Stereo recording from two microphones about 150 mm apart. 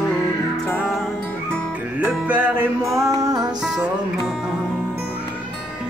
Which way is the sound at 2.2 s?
10° right (ahead or behind).